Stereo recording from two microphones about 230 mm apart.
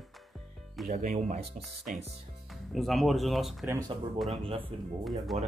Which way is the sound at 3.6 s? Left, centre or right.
Centre.